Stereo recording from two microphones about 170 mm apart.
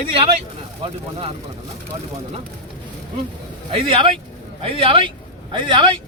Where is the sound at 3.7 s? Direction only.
30° right (ahead or behind).